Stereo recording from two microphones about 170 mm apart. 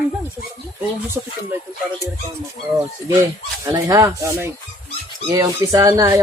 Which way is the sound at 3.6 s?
20° right (ahead or behind).